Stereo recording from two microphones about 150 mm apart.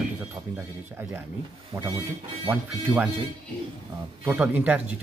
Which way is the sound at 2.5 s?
10° right (ahead or behind).